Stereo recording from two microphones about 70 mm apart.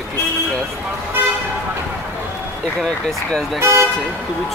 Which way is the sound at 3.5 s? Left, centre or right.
Right.